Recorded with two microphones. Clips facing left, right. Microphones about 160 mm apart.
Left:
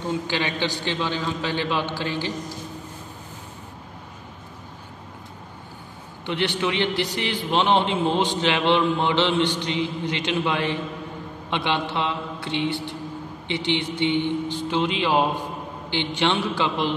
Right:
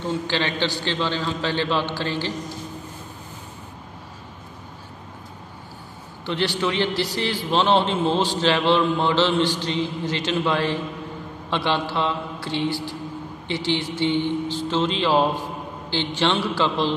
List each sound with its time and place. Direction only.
0.3 s a man's voice: 15° left (ahead or behind)
6.2 s a man's voice: 20° left (ahead or behind)